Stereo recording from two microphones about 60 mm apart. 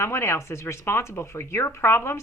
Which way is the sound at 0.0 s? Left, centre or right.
Left.